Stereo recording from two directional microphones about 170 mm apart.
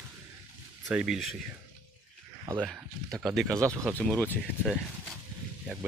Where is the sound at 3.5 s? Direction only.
20° right (ahead or behind).